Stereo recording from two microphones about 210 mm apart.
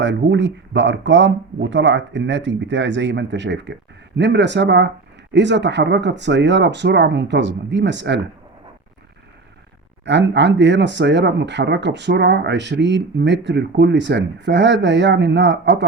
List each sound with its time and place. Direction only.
0.0 s speech: 60° right (ahead or behind)
10.1 s speech: 55° right (ahead or behind)